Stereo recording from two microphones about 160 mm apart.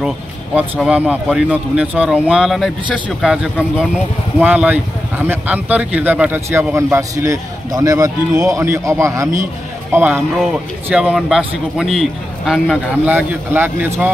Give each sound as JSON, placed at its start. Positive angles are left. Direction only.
{"t": 0.6, "sound": "a man's voice", "side_deg": -10}